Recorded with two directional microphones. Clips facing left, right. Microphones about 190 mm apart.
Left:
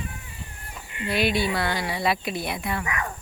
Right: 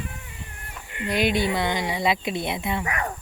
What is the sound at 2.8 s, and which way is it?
Cricket, 35° right (ahead or behind).